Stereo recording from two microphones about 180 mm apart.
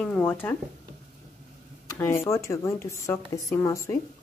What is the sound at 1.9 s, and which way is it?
A woman's voice, 15° left (ahead or behind).